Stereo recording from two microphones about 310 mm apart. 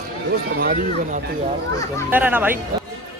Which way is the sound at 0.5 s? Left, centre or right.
Right.